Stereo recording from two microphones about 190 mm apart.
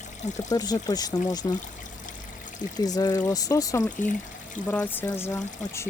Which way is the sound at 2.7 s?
20° left (ahead or behind).